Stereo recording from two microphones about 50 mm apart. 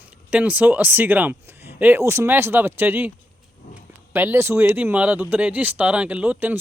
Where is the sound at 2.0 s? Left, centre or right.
Right.